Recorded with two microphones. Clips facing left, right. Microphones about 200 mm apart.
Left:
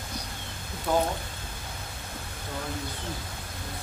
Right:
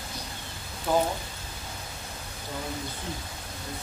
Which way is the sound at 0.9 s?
5° right (ahead or behind).